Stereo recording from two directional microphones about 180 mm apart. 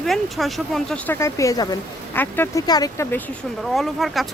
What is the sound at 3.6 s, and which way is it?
Speech, centre (ahead or behind).